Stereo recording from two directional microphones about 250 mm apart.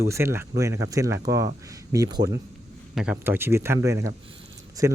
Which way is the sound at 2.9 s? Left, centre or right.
Centre.